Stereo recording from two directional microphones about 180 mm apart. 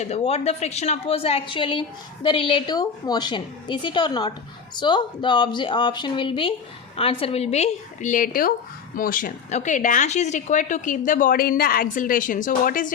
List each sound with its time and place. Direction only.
0.0 s a woman's voice: 35° left (ahead or behind)